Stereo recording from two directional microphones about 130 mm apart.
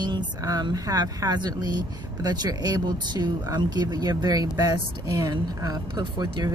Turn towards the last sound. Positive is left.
turn(degrees=-35)  # may be behind; listen again after turning